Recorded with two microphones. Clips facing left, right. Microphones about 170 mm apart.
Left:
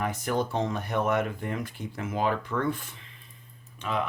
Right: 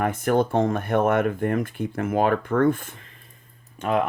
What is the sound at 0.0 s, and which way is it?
Speech, 55° right (ahead or behind).